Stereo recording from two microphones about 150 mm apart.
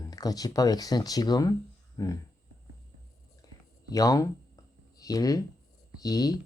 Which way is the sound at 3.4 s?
25° left (ahead or behind).